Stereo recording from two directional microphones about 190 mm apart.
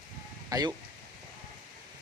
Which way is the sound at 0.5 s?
20° right (ahead or behind).